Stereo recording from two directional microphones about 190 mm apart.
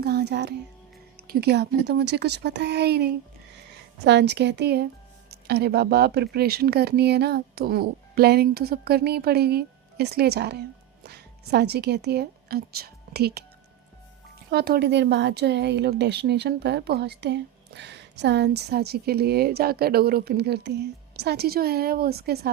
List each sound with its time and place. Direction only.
0.0 s a woman's voice: 60° right (ahead or behind)
14.5 s speech: 55° right (ahead or behind)